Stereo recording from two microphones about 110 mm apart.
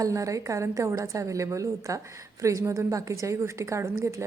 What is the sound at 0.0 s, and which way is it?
A woman's voice, 30° right (ahead or behind).